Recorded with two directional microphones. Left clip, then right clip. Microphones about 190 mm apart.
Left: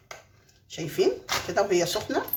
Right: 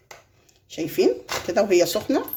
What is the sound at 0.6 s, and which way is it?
Speech, 45° right (ahead or behind).